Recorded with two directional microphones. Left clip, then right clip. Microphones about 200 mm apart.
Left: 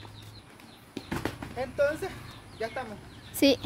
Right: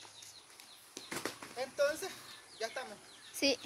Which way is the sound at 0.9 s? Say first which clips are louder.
Left 7 dB; 40° left (ahead or behind).